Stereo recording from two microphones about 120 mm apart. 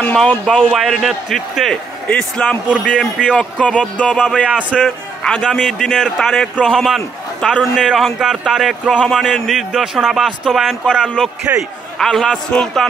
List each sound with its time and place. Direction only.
0.1 s a man's voice: 5° left (ahead or behind)
11.5 s a man's voice: 15° right (ahead or behind)
12.0 s a man's voice: 5° left (ahead or behind)